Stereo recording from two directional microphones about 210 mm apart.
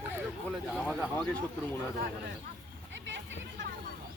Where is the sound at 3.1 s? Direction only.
60° right (ahead or behind).